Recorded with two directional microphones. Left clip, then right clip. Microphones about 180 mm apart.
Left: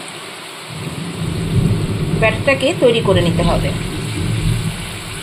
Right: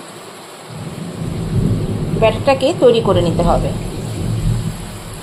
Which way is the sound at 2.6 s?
Centre (ahead or behind).